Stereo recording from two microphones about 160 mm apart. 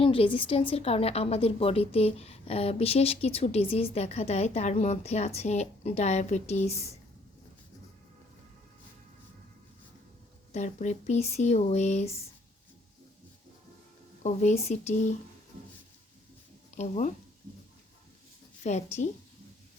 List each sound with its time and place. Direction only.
0.0 s a woman's voice: 35° left (ahead or behind)
10.5 s a woman's voice: 50° left (ahead or behind)
14.2 s a woman's voice: 45° left (ahead or behind)
16.7 s speech: 45° left (ahead or behind)
18.6 s a woman's voice: 45° left (ahead or behind)